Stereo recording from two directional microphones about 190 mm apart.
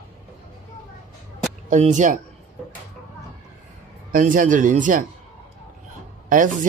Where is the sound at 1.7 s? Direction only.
40° right (ahead or behind).